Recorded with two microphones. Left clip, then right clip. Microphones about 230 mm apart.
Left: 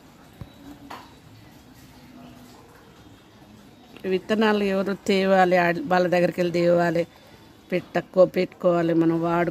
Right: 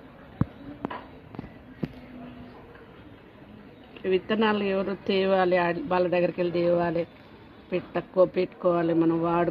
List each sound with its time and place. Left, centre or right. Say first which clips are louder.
4.0 s speech: left 2 dB; left